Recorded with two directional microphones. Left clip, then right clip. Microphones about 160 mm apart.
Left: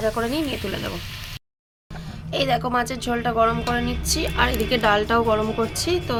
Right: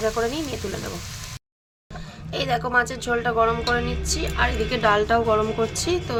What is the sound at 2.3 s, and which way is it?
A woman's voice, 15° left (ahead or behind).